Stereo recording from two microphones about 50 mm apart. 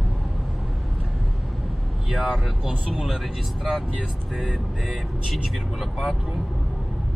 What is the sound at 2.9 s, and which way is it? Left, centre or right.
Speech, centre.